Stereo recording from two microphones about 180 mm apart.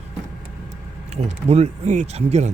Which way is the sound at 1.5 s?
40° right (ahead or behind).